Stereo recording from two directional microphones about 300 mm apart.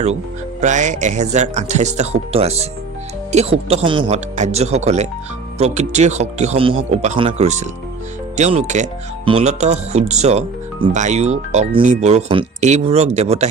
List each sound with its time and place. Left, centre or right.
0.6 s speech: right
3.7 s speech: centre